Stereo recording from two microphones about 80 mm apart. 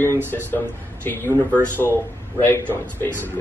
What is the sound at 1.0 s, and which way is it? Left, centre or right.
Speech, left.